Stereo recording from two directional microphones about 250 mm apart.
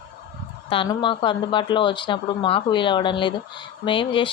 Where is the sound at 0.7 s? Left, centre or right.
Centre.